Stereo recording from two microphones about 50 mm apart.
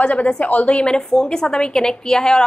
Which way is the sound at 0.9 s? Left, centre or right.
Centre.